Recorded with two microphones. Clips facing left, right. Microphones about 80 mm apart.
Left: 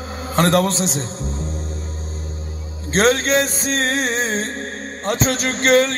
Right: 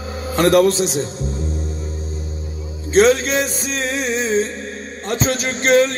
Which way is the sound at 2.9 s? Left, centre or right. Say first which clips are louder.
Right 3 dB; left.